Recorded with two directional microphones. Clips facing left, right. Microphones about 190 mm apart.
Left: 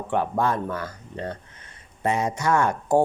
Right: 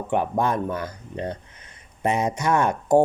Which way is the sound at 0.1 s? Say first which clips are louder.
Right 1 dB; 20° right (ahead or behind).